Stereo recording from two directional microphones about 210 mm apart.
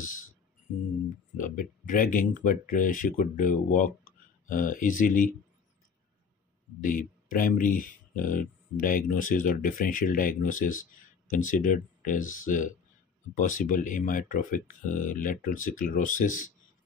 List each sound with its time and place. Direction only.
1.4 s speech: 40° left (ahead or behind)
6.8 s speech: 40° left (ahead or behind)